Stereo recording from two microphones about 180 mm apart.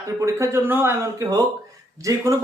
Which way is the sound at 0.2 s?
15° right (ahead or behind).